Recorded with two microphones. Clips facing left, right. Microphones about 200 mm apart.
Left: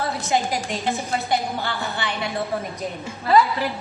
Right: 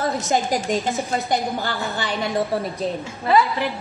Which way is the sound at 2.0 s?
35° right (ahead or behind).